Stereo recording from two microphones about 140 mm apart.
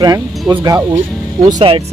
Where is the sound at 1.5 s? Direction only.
40° right (ahead or behind).